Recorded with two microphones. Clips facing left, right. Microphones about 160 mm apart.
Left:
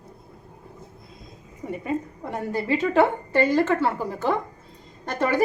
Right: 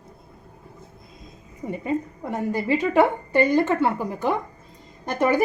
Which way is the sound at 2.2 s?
15° right (ahead or behind).